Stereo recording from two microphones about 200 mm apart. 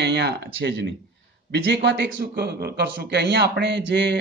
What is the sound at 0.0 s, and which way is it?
Speech, 60° right (ahead or behind).